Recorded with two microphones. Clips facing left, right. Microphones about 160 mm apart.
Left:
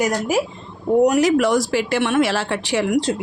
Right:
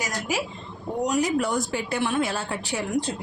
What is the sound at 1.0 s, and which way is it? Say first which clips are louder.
Speech: left 8 dB; 75° left (ahead or behind).